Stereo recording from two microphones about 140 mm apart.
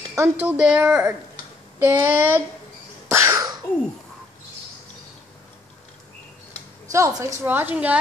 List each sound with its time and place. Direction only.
0.1 s speech: 15° right (ahead or behind)
3.1 s a sound: 20° right (ahead or behind)
6.9 s a woman's voice: 20° right (ahead or behind)